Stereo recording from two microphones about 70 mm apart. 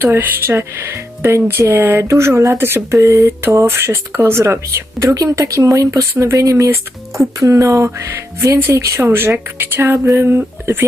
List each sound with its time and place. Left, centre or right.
0.0 s speech: right
9.0 s speech: right